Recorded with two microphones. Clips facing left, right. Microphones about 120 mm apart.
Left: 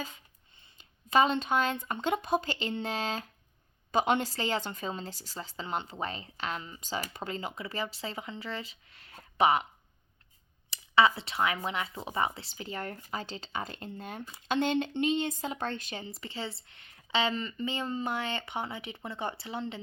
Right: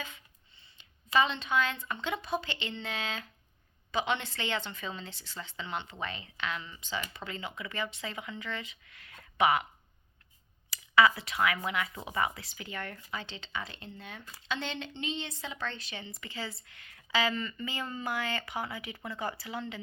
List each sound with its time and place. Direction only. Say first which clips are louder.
0.0 s speech: left 3 dB; 45° left (ahead or behind)
10.7 s a woman's voice: even; 25° left (ahead or behind)